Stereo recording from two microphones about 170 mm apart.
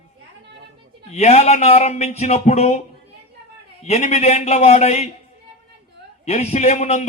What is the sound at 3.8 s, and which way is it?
A man's voice, 40° left (ahead or behind).